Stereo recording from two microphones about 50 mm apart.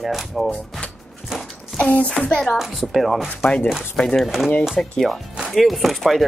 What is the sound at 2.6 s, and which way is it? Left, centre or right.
Speech, centre.